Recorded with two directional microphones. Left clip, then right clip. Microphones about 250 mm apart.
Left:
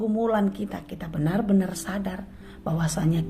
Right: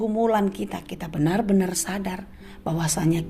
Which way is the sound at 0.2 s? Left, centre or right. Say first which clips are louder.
Right 4 dB; right.